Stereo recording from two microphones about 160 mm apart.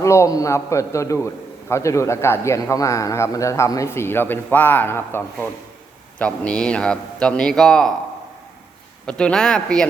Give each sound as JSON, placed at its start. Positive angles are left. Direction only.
{"t": 0.0, "sound": "a man's voice", "side_deg": 20}
{"t": 9.0, "sound": "a man's voice", "side_deg": 5}